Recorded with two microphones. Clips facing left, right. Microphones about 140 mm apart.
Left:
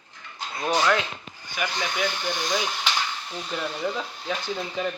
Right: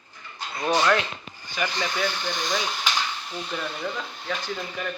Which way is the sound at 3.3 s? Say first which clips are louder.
Left 1 dB; 5° left (ahead or behind).